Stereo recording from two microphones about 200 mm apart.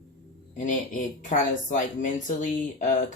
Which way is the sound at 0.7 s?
40° left (ahead or behind).